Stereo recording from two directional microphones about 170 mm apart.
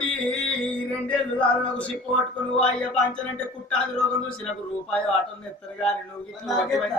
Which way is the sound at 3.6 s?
5° left (ahead or behind).